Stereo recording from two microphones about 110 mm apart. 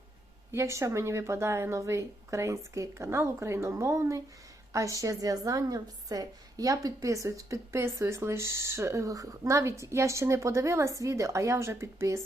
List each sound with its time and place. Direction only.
0.5 s a woman's voice: 25° right (ahead or behind)